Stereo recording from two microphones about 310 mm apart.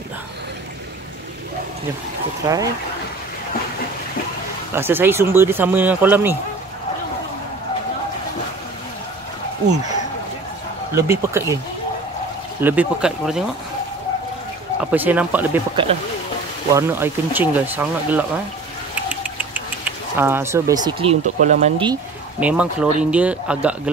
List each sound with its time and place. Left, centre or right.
2.4 s speech: centre
4.7 s speech: centre
11.0 s speech: centre
12.6 s speech: centre
14.8 s speech: centre
15.7 s speech: centre
22.4 s speech: centre